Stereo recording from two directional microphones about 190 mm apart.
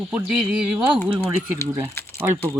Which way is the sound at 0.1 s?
5° right (ahead or behind).